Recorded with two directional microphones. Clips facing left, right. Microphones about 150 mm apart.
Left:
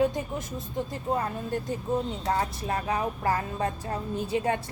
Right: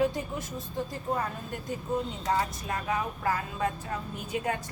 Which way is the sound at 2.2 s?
30° left (ahead or behind).